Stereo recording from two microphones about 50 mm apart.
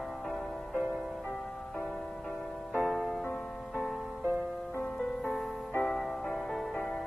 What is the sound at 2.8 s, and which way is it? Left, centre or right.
Music, centre.